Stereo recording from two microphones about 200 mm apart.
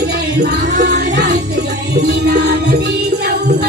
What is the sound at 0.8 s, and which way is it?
Music, 55° right (ahead or behind).